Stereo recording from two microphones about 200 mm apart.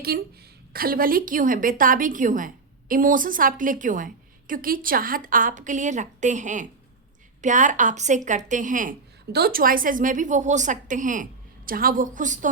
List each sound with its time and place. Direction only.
0.1 s a woman's voice: 50° right (ahead or behind)